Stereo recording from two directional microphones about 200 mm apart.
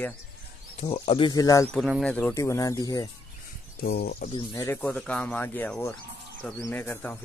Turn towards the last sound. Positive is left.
turn(degrees=10)  # may be behind; listen again after turning